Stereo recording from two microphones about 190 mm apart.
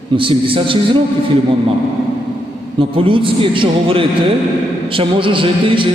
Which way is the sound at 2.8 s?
25° right (ahead or behind).